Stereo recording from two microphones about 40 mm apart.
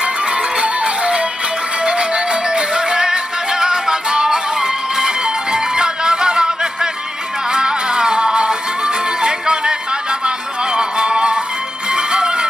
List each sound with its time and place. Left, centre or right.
0.0 s music: right